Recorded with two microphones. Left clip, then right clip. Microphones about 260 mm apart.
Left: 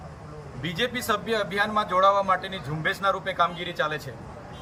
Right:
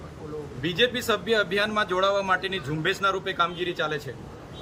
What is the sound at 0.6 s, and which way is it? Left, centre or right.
A man's voice, centre.